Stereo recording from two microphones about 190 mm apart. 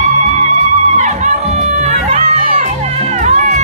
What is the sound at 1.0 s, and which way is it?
Crowd, 40° right (ahead or behind).